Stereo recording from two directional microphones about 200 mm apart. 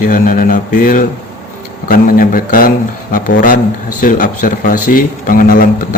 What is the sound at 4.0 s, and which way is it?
Speech, 45° left (ahead or behind).